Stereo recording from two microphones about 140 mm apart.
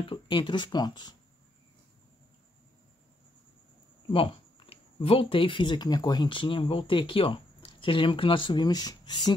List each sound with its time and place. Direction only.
0.0 s speech: 35° left (ahead or behind)
4.1 s speech: 40° left (ahead or behind)